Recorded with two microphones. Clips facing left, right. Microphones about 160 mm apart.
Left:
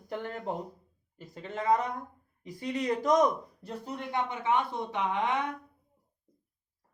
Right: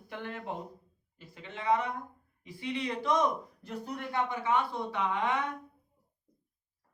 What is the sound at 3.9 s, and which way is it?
Speech, 20° left (ahead or behind).